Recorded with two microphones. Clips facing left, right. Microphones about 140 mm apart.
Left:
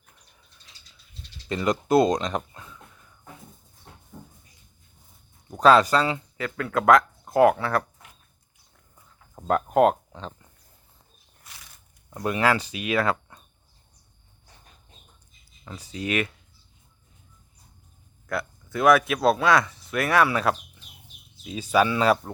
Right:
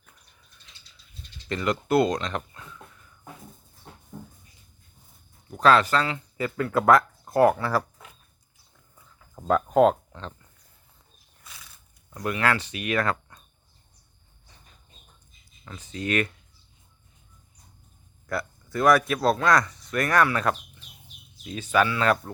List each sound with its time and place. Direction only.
1.5 s speech: 15° left (ahead or behind)
5.5 s speech: 10° left (ahead or behind)
6.3 s speech: 5° right (ahead or behind)
9.5 s speech: 5° left (ahead or behind)
12.1 s speech: 25° left (ahead or behind)
12.9 s speech: 10° left (ahead or behind)
15.6 s speech: 10° left (ahead or behind)
18.3 s speech: centre (ahead or behind)